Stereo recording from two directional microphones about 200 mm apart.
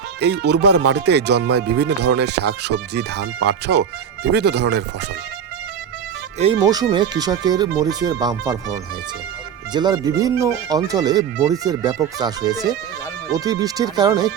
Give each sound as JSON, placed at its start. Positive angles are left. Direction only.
{"t": 0.2, "sound": "speech", "side_deg": -60}
{"t": 6.4, "sound": "speech", "side_deg": -25}